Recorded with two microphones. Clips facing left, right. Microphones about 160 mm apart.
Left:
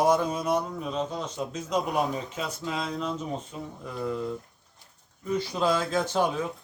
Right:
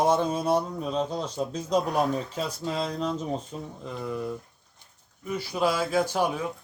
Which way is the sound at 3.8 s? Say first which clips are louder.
Left 2 dB; 15° right (ahead or behind).